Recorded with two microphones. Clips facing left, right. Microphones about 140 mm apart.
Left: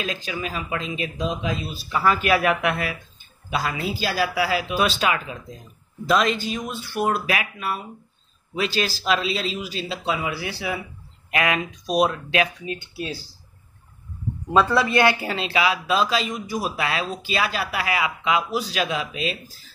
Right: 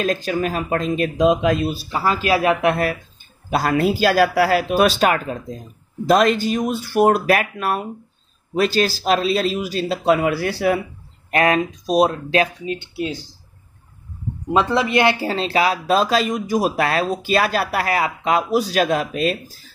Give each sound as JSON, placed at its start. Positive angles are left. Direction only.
{"t": 0.0, "sound": "speech", "side_deg": -45}
{"t": 1.2, "sound": "speech", "side_deg": -65}
{"t": 1.9, "sound": "speech", "side_deg": -30}
{"t": 3.4, "sound": "speech", "side_deg": -50}
{"t": 8.5, "sound": "speech", "side_deg": -45}
{"t": 11.3, "sound": "speech", "side_deg": -35}
{"t": 14.5, "sound": "speech", "side_deg": -20}
{"t": 15.2, "sound": "speech", "side_deg": -40}